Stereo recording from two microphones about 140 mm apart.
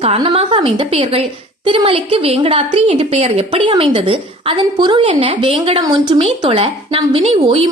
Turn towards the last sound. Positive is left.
turn(degrees=-45)  # may be behind; listen again after turning